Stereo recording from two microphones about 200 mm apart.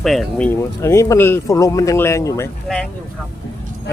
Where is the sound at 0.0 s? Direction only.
Centre (ahead or behind).